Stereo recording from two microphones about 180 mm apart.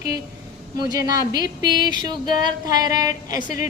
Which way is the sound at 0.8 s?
20° right (ahead or behind).